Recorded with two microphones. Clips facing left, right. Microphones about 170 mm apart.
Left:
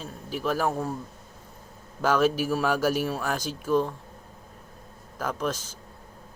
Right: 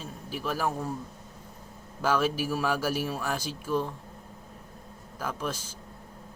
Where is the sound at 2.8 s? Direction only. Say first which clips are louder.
Left 4 dB; 45° left (ahead or behind).